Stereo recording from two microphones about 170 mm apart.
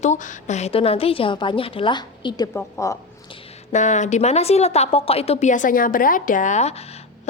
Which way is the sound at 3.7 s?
45° left (ahead or behind).